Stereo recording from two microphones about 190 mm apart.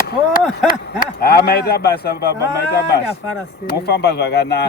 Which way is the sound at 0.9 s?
55° left (ahead or behind).